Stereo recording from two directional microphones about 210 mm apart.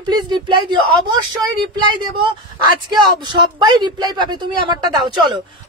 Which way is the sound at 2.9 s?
20° right (ahead or behind).